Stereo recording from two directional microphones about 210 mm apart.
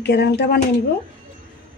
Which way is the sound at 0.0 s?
50° left (ahead or behind).